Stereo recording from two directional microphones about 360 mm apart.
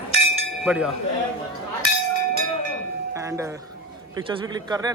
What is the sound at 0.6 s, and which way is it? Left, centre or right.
Speech, centre.